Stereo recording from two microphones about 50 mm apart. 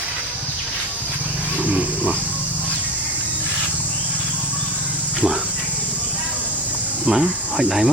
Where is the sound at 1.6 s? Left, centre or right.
Right.